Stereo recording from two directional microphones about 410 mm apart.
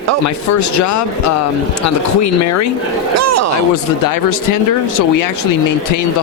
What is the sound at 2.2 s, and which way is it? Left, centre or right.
Speech, left.